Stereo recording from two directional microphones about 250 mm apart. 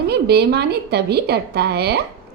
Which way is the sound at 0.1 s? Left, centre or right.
Right.